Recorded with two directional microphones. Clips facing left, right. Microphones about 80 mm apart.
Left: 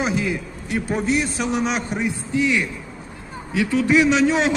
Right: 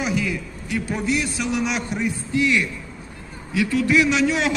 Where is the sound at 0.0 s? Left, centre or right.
Left.